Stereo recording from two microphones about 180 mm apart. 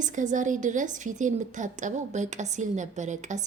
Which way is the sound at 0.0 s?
45° right (ahead or behind).